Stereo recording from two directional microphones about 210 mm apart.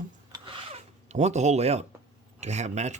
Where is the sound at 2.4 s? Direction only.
30° right (ahead or behind).